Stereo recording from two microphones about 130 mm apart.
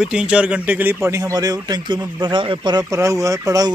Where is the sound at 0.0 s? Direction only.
5° right (ahead or behind); by 2.8 s 40° right (ahead or behind).